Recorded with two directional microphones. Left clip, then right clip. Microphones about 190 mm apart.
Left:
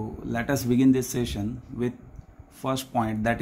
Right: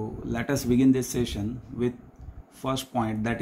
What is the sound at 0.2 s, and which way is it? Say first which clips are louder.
Speech: left 2 dB; 25° left (ahead or behind).